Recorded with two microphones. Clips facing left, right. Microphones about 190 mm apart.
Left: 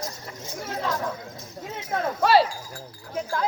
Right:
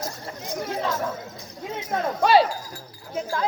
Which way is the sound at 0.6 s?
10° right (ahead or behind).